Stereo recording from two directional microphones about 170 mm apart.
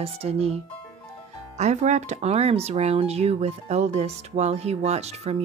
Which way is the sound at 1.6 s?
45° right (ahead or behind).